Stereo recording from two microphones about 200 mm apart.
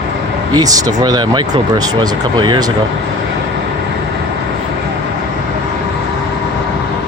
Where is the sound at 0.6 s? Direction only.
20° right (ahead or behind).